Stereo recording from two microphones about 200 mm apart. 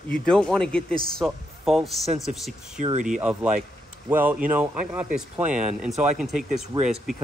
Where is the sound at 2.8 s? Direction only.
35° right (ahead or behind).